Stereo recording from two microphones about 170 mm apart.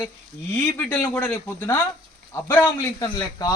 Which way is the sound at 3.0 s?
25° left (ahead or behind).